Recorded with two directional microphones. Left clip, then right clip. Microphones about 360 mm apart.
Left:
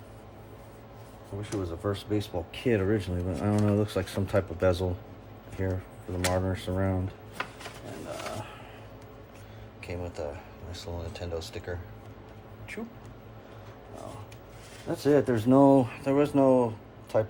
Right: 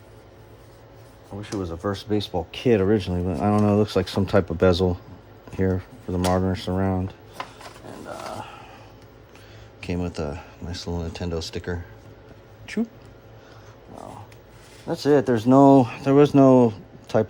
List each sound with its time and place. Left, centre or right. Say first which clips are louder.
1.4 s speech: right 4 dB; right
9.8 s speech: right 6 dB; right
14.8 s speech: right 5 dB; right